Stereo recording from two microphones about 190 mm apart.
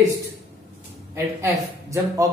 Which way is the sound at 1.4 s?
15° right (ahead or behind).